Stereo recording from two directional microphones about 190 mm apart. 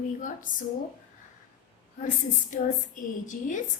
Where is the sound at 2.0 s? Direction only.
40° left (ahead or behind).